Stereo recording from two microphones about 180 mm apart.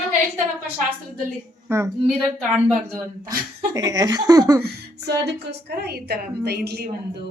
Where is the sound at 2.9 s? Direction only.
15° right (ahead or behind).